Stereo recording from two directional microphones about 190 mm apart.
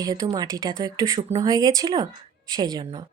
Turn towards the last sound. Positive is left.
turn(degrees=-25)  # may be behind; listen again after turning